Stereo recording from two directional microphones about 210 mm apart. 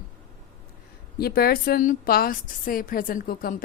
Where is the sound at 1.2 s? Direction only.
45° left (ahead or behind).